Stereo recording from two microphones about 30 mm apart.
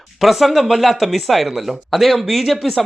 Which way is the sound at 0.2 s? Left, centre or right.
Centre.